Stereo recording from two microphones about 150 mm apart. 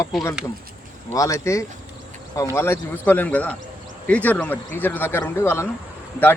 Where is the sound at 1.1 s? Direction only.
20° left (ahead or behind).